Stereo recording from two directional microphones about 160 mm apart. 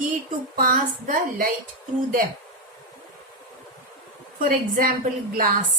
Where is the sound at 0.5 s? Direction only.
60° right (ahead or behind).